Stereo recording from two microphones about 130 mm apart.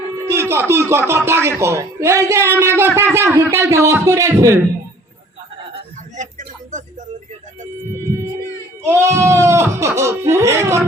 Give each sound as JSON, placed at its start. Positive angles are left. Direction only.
{"t": 0.3, "sound": "a sound", "side_deg": -20}
{"t": 0.7, "sound": "speech", "side_deg": -20}
{"t": 8.8, "sound": "speech", "side_deg": -20}